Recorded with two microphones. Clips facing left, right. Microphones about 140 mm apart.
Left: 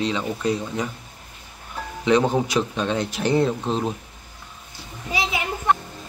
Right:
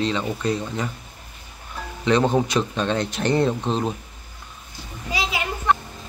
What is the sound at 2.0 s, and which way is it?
Speech, 10° left (ahead or behind).